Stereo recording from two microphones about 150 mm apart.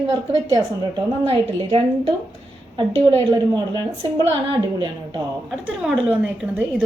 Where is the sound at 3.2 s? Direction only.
30° right (ahead or behind).